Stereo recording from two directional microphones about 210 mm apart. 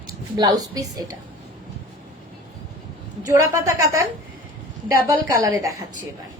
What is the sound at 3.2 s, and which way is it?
A woman's voice, 15° right (ahead or behind).